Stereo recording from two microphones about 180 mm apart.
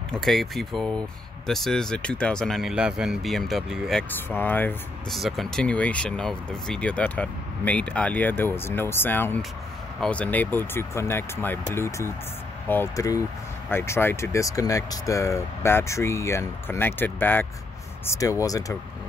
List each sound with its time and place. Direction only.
0.1 s speech: centre (ahead or behind); by 18.8 s 20° left (ahead or behind)